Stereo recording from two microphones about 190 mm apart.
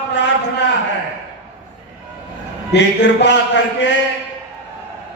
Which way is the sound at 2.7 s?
65° left (ahead or behind).